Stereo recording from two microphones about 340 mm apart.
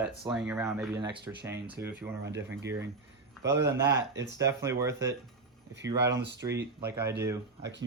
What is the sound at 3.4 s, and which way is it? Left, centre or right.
Speech, right.